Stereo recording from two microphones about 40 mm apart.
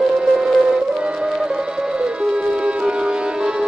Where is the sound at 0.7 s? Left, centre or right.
Right.